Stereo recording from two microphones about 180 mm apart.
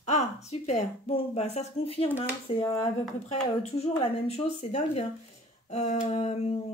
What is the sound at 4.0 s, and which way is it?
Speech, 35° left (ahead or behind).